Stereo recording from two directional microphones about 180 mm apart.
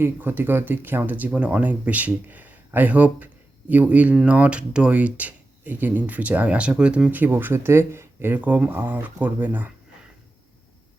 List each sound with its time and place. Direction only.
0.0 s speech: 10° right (ahead or behind)